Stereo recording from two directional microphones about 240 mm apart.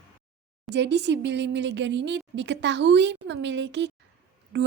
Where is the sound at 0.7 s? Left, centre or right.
Right.